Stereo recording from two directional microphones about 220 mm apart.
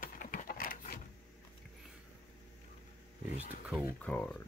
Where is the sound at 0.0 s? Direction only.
40° left (ahead or behind).